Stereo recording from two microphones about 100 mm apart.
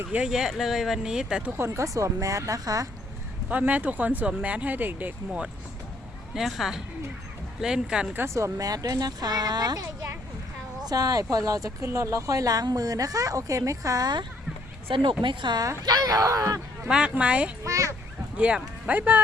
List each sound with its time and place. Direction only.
0.1 s speech: 10° right (ahead or behind)
1.5 s a woman's voice: 25° right (ahead or behind)
3.5 s speech: 15° right (ahead or behind)
6.3 s speech: 5° right (ahead or behind)
8.2 s a woman's voice: 30° right (ahead or behind)
10.8 s a woman's voice: 40° right (ahead or behind)
14.8 s speech: 60° right (ahead or behind)
15.8 s a woman's voice: 40° right (ahead or behind)
16.8 s speech: 10° right (ahead or behind)
17.6 s a woman's voice: 30° right (ahead or behind)
18.3 s speech: 10° right (ahead or behind)